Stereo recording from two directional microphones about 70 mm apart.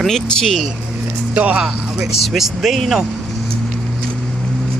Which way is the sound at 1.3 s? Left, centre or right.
Centre.